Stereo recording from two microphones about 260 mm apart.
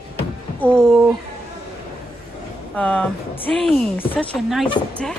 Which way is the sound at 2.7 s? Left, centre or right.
Centre.